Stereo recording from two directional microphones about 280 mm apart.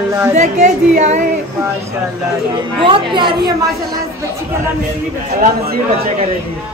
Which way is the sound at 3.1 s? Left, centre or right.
Centre.